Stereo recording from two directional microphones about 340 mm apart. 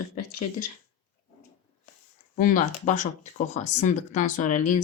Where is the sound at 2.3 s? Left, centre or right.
Left.